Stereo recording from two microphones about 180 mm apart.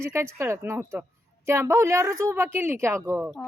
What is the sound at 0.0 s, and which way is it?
Speech, 15° right (ahead or behind).